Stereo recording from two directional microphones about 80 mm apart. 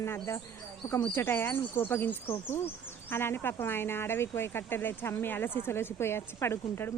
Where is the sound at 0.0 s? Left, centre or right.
Left.